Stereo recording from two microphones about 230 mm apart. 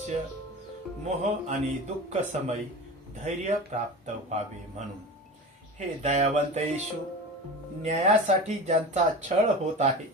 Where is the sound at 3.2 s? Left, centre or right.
Right.